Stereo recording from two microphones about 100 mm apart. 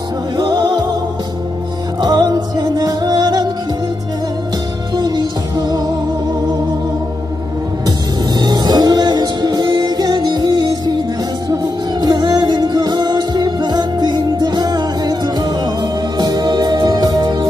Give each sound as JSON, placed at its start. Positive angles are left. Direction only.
{"t": 0.4, "sound": "music", "side_deg": -45}
{"t": 2.0, "sound": "music", "side_deg": -45}
{"t": 4.9, "sound": "music", "side_deg": -45}
{"t": 8.4, "sound": "music", "side_deg": -45}